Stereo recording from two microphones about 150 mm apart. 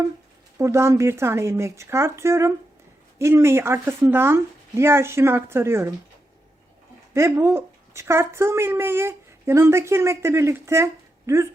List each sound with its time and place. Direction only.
0.6 s speech: 20° right (ahead or behind)
7.1 s speech: 20° right (ahead or behind)